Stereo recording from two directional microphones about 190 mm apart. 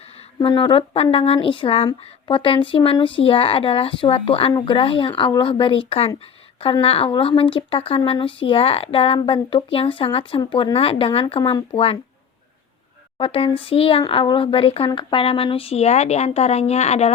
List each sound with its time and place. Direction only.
0.3 s speech: 25° left (ahead or behind)
13.1 s speech: 30° left (ahead or behind)